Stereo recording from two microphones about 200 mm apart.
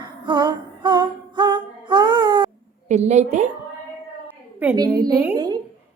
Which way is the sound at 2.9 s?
35° right (ahead or behind).